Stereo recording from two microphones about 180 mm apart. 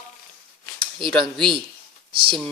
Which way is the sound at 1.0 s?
25° right (ahead or behind).